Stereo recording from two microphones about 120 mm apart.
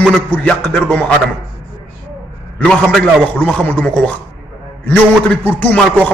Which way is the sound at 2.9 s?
10° left (ahead or behind).